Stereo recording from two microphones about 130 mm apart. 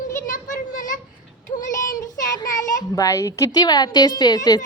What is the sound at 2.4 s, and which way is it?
A child's voice, 25° left (ahead or behind).